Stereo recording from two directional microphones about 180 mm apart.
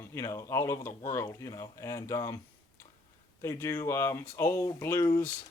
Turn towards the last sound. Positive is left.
turn(degrees=15)  # may be behind; listen again after turning